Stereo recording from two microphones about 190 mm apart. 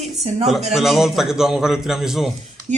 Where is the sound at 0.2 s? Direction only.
35° right (ahead or behind).